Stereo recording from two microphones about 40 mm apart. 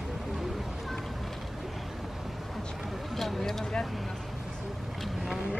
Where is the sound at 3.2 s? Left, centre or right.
Centre.